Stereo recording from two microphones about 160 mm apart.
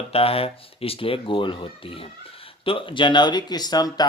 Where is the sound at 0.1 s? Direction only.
35° left (ahead or behind).